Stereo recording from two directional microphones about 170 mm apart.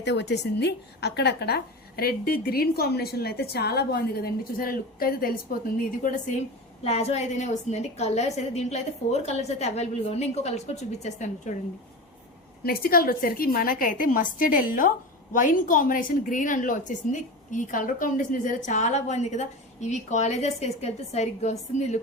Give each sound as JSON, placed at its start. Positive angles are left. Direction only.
{"t": 0.0, "sound": "a woman's voice", "side_deg": 85}
{"t": 6.8, "sound": "a woman's voice", "side_deg": 40}
{"t": 12.6, "sound": "a woman's voice", "side_deg": 60}